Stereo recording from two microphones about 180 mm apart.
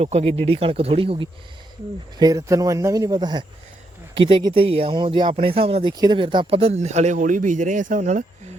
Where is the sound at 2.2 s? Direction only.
20° right (ahead or behind); by 8.2 s 40° right (ahead or behind).